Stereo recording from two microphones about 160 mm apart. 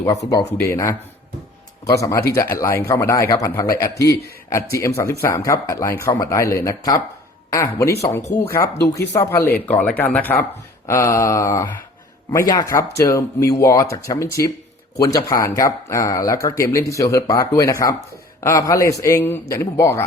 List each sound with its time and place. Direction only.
0.3 s speech: 20° left (ahead or behind)